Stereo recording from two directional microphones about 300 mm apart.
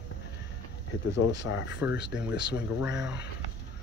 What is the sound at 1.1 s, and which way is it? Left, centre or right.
Speech, left.